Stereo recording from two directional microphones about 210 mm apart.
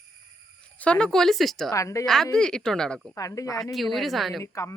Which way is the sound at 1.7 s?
15° left (ahead or behind).